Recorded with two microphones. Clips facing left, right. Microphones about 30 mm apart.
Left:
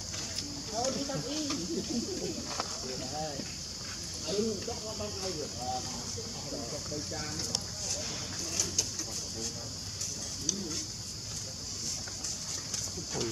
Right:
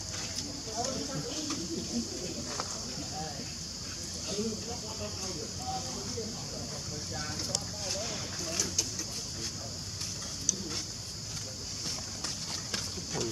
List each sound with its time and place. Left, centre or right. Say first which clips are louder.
0.7 s speech: left 3 dB; centre
6.5 s speech: left 2 dB; centre
13.1 s speech: even; right